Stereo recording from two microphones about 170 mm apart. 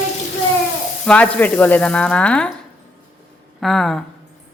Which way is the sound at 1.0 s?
5° left (ahead or behind).